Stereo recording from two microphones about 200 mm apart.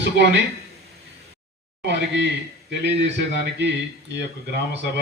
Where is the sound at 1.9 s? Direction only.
60° right (ahead or behind).